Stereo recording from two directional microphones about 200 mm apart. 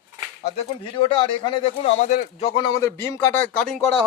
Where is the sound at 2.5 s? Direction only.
20° left (ahead or behind).